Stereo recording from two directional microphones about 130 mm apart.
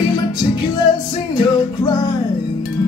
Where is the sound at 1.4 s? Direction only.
30° left (ahead or behind).